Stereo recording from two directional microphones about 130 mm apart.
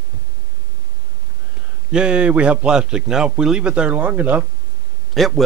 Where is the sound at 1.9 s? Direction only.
10° right (ahead or behind).